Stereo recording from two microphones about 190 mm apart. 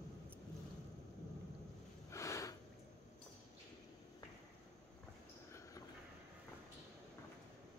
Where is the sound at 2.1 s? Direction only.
15° left (ahead or behind).